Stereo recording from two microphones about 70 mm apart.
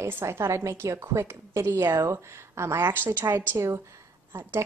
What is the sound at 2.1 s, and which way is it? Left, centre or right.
Speech, right.